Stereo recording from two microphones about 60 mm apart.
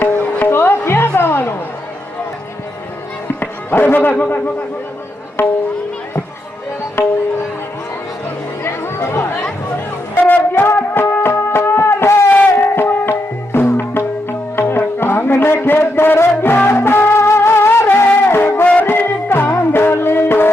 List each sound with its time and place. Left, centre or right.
0.0 s music: left
3.4 s speech: left
8.6 s chatter: left
10.2 s music: left
18.6 s music: left
18.9 s music: left